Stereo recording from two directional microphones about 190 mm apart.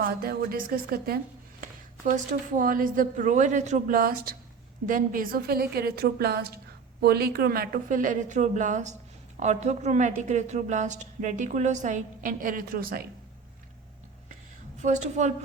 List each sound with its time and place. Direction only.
0.0 s a woman's voice: 50° right (ahead or behind)
1.6 s a woman's voice: 40° right (ahead or behind)
14.8 s a woman's voice: 40° right (ahead or behind)